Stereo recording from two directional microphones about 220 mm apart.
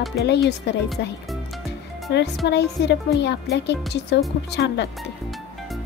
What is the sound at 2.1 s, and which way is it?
Speech, 50° left (ahead or behind).